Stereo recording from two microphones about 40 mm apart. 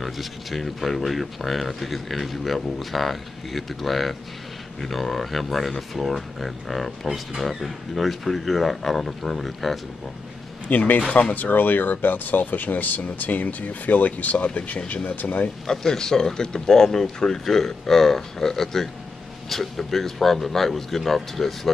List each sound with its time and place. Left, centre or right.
0.0 s speech: centre
10.7 s speech: left
11.1 s speech: left
15.6 s speech: centre